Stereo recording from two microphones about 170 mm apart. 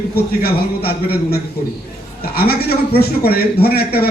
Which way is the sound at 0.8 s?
65° left (ahead or behind).